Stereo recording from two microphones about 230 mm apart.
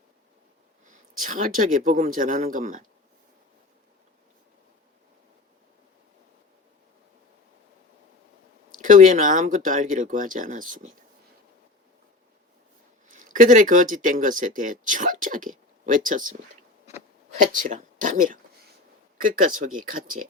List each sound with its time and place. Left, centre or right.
1.2 s speech: right
8.8 s speech: right
13.1 s speech: right
17.4 s speech: right